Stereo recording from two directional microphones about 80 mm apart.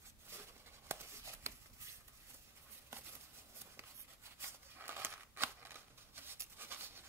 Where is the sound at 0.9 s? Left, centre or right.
Right.